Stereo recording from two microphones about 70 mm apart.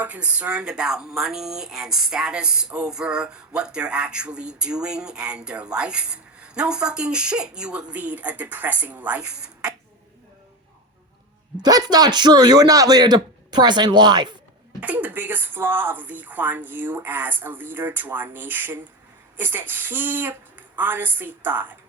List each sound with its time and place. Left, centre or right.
0.0 s speech: right
11.6 s a man's voice: right
14.8 s speech: right